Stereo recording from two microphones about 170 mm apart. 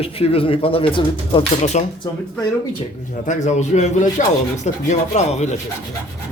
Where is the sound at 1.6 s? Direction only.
40° left (ahead or behind).